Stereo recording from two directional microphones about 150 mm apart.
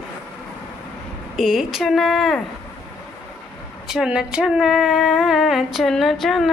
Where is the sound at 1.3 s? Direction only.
Centre (ahead or behind).